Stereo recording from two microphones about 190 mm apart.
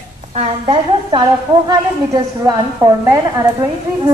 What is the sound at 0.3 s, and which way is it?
A woman's voice, 30° right (ahead or behind).